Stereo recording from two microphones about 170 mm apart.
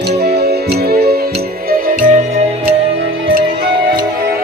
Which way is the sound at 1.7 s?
55° right (ahead or behind).